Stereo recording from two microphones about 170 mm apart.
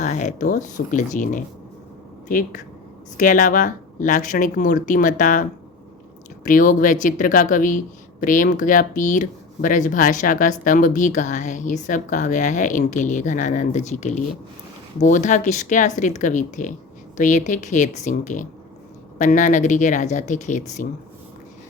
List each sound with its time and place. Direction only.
0.0 s speech: 45° left (ahead or behind)